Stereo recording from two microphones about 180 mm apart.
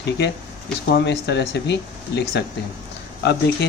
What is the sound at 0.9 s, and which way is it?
Speech, 75° left (ahead or behind).